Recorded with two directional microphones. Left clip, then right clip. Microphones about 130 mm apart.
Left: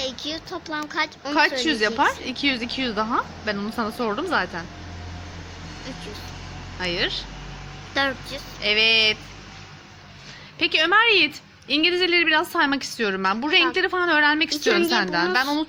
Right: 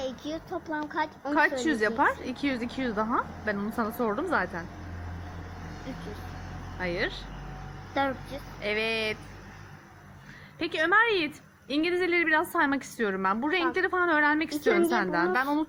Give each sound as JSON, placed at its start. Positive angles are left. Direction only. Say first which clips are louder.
{"t": 0.0, "sound": "speech", "louder": "left 5 dB", "side_deg": -40}
{"t": 1.3, "sound": "a woman's voice", "louder": "left 5 dB", "side_deg": 15}
{"t": 6.7, "sound": "a sound", "louder": "left 6 dB", "side_deg": 20}
{"t": 7.9, "sound": "speech", "louder": "left 5 dB", "side_deg": -30}
{"t": 8.6, "sound": "a sound", "louder": "left 11 dB", "side_deg": 20}
{"t": 10.6, "sound": "a woman's voice", "louder": "left 6 dB", "side_deg": 15}